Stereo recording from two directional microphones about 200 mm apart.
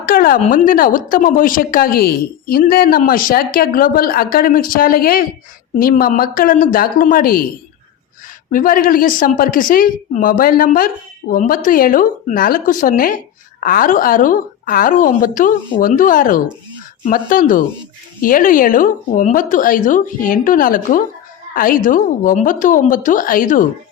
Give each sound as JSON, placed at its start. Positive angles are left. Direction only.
{"t": 0.0, "sound": "speech", "side_deg": 45}
{"t": 8.5, "sound": "a woman's voice", "side_deg": 45}